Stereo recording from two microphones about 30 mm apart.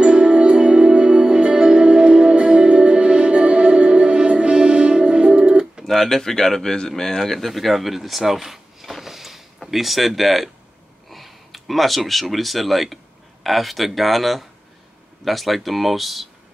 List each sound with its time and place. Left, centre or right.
0.0 s music: right
5.9 s speech: centre
7.3 s speech: centre